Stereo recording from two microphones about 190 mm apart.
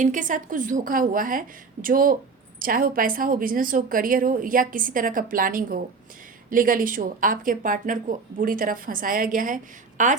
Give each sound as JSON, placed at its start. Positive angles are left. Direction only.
{"t": 0.0, "sound": "a woman's voice", "side_deg": -40}